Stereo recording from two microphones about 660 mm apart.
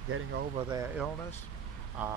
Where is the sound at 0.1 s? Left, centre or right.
Centre.